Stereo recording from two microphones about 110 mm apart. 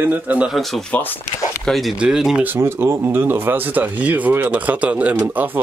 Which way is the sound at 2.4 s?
20° right (ahead or behind).